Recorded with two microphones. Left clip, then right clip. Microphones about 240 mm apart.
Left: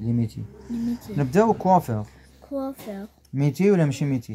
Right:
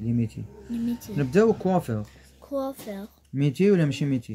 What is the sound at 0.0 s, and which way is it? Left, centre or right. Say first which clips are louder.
Speech: left 1 dB; centre.